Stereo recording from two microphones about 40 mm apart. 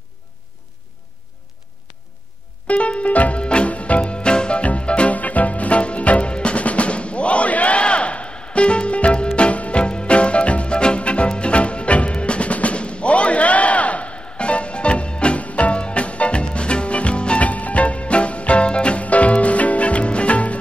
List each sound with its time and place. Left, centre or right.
2.6 s music: left